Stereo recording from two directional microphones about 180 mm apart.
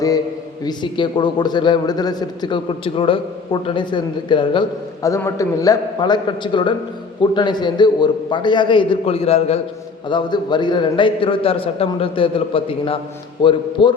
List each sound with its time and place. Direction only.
0.6 s a man's voice: 25° left (ahead or behind)